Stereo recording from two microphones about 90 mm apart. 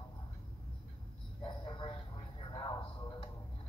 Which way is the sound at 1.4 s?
60° left (ahead or behind).